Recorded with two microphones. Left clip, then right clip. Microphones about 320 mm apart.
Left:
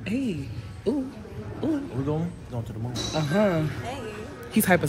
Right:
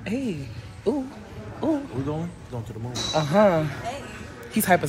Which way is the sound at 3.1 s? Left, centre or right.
Centre.